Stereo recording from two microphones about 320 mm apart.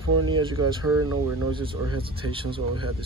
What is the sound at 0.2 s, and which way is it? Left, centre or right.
Speech, right.